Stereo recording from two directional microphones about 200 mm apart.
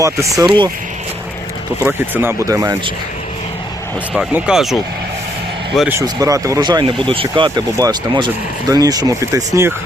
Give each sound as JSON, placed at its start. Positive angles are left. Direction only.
{"t": 0.0, "sound": "speech", "side_deg": -15}
{"t": 1.8, "sound": "speech", "side_deg": -10}
{"t": 4.1, "sound": "speech", "side_deg": -5}
{"t": 6.0, "sound": "speech", "side_deg": -15}